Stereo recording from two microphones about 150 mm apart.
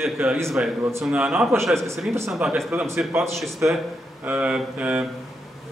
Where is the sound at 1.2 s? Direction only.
5° right (ahead or behind).